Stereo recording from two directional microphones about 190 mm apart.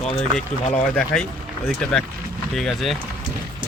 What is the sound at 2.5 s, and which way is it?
Speech, centre (ahead or behind).